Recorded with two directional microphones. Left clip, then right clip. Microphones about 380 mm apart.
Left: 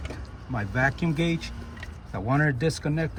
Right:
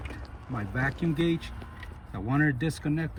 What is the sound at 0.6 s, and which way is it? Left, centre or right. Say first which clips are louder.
Speech: left 6 dB; left.